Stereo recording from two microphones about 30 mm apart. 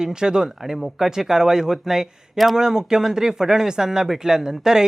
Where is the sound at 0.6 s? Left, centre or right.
Centre.